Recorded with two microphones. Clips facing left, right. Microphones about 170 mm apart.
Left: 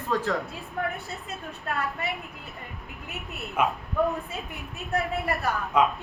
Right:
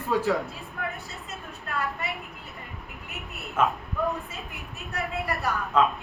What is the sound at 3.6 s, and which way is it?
Speech, 15° left (ahead or behind).